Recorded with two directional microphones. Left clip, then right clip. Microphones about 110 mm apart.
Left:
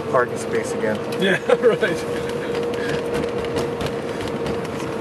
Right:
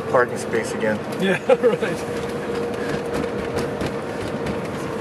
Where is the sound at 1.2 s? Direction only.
20° left (ahead or behind).